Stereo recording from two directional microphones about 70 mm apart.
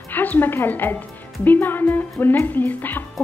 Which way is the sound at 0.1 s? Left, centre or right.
Left.